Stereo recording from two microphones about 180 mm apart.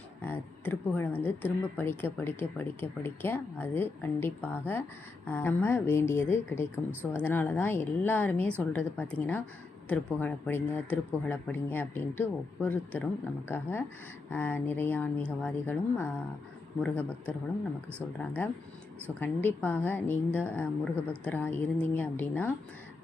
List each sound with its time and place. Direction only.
0.2 s speech: 10° left (ahead or behind)
18.4 s speech: 10° left (ahead or behind)